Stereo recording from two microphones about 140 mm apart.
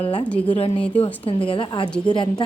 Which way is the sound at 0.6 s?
45° left (ahead or behind).